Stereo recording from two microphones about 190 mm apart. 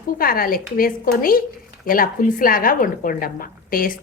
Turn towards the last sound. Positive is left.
turn(degrees=50)  # may be behind; listen again after turning